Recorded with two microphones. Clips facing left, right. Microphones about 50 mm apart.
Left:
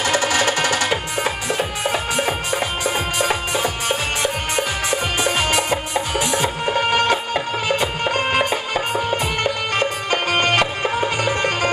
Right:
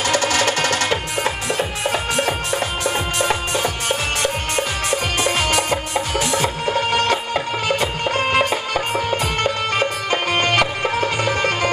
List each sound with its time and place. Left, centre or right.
0.0 s music: centre
9.8 s music: centre